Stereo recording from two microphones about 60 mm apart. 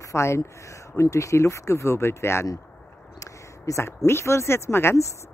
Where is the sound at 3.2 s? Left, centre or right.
Left.